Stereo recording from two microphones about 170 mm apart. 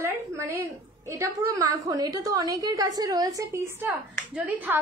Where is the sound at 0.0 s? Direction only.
15° right (ahead or behind).